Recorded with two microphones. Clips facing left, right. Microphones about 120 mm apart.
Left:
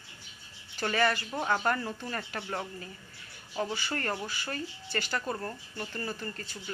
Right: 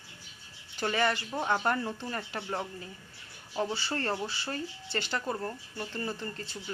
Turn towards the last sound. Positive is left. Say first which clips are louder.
# right 1 dB
turn(degrees=-20)  # may be behind; listen again after turning